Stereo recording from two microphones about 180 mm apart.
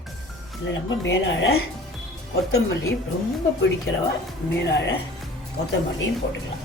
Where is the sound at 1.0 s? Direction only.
90° left.